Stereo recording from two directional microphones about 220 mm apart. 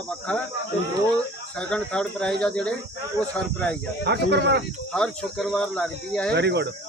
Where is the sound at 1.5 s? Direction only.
5° left (ahead or behind).